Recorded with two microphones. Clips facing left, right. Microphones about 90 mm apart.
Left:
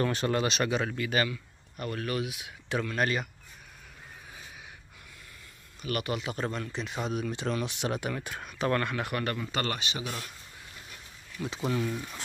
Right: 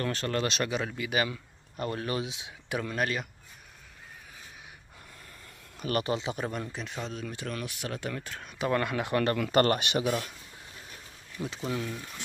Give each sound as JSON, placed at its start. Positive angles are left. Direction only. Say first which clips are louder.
{"t": 0.0, "sound": "speech", "louder": "left 2 dB", "side_deg": 15}
{"t": 0.5, "sound": "speech", "louder": "left 2 dB", "side_deg": 0}
{"t": 0.9, "sound": "speech", "louder": "left 1 dB", "side_deg": -10}
{"t": 1.3, "sound": "speech", "louder": "even", "side_deg": -30}
{"t": 3.0, "sound": "speech", "louder": "left 2 dB", "side_deg": 0}
{"t": 5.8, "sound": "speech", "louder": "right 3 dB", "side_deg": -35}
{"t": 6.3, "sound": "speech", "louder": "left 1 dB", "side_deg": -15}
{"t": 6.8, "sound": "speech", "louder": "left 4 dB", "side_deg": 5}
{"t": 8.5, "sound": "speech", "louder": "left 1 dB", "side_deg": -5}
{"t": 8.7, "sound": "speech", "louder": "right 3 dB", "side_deg": -15}
{"t": 9.5, "sound": "speech", "louder": "right 8 dB", "side_deg": -50}
{"t": 11.4, "sound": "speech", "louder": "even", "side_deg": -25}